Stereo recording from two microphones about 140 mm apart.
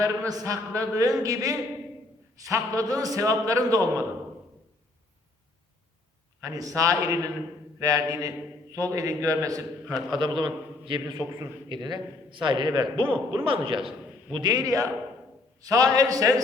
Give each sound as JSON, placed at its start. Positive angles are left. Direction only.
{"t": 0.0, "sound": "a man's voice", "side_deg": -20}
{"t": 6.4, "sound": "a man's voice", "side_deg": -25}
{"t": 10.1, "sound": "a man's voice", "side_deg": -35}